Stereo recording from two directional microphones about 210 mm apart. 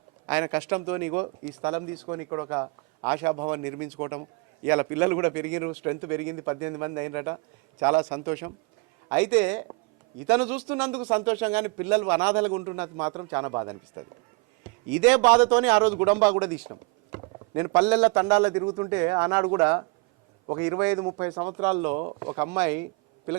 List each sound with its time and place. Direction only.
0.3 s a man's voice: 10° right (ahead or behind)
11.0 s speech: 25° right (ahead or behind)
11.3 s a man's voice: 10° right (ahead or behind)
15.3 s a man's voice: 5° right (ahead or behind)
17.1 s clip-clop: 20° right (ahead or behind)
17.7 s a man's voice: 10° right (ahead or behind)